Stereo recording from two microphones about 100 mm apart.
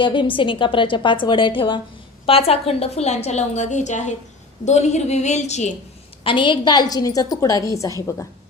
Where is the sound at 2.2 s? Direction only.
75° left (ahead or behind).